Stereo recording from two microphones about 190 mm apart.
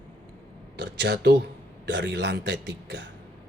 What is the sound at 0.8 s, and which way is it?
Speech, 65° right (ahead or behind).